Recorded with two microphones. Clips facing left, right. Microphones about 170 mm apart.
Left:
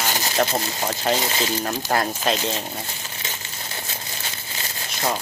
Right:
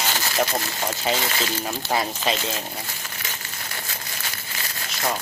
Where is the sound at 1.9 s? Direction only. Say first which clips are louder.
Left 1 dB; centre (ahead or behind).